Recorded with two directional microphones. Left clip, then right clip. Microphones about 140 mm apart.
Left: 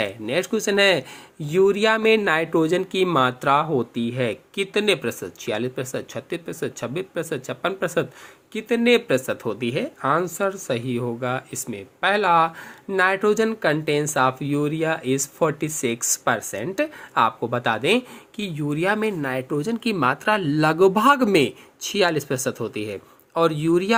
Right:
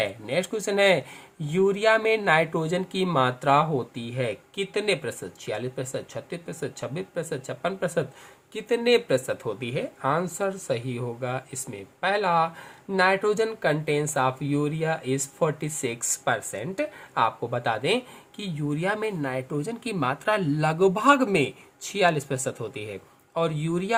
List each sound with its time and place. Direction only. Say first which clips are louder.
0.0 s speech: left 3 dB; 30° left (ahead or behind)